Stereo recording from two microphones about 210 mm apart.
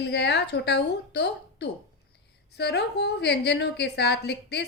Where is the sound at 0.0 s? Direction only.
55° left (ahead or behind).